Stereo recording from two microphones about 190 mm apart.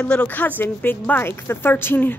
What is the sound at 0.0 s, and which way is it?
Speech, 5° left (ahead or behind).